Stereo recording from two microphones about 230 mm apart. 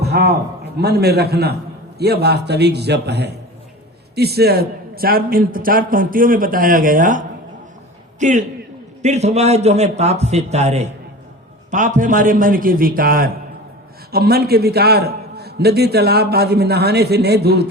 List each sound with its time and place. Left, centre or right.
0.0 s a man's voice: right